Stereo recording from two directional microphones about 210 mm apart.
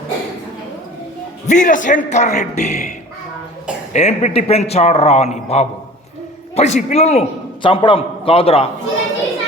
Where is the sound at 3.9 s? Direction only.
30° left (ahead or behind).